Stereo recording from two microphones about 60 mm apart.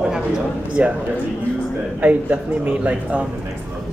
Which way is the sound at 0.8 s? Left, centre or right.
Right.